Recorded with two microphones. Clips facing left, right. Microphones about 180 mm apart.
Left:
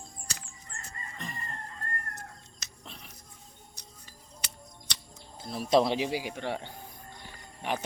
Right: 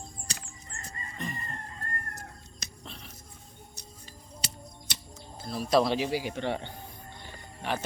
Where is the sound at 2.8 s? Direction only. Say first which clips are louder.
Right 1 dB; 10° left (ahead or behind).